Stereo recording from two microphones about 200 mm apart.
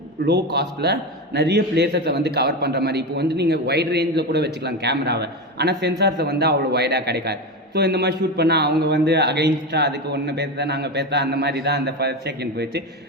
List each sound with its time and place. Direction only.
0.3 s a man's voice: 55° right (ahead or behind)